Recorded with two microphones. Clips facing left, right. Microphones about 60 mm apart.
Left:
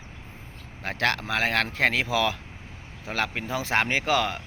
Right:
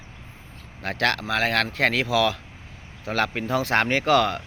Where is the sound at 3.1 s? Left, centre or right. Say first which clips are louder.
Right 4 dB; centre.